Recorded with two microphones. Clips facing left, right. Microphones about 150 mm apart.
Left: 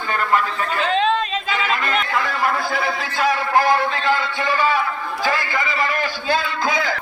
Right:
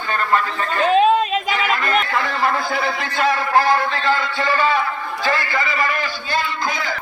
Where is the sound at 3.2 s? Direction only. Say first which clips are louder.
Right 1 dB; 15° left (ahead or behind).